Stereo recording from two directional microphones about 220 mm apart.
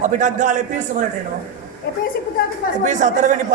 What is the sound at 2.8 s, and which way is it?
Speech, 35° right (ahead or behind).